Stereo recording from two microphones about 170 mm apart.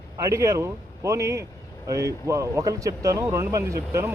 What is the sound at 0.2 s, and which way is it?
Speech, 20° right (ahead or behind).